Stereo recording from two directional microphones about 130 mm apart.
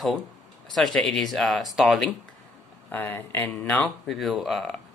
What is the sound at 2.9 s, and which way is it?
Speech, 15° left (ahead or behind).